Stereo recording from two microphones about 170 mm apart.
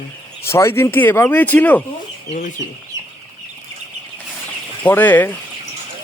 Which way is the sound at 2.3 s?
40° left (ahead or behind).